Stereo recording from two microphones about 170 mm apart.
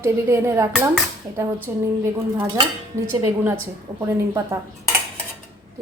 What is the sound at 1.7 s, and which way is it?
Speech, 15° right (ahead or behind).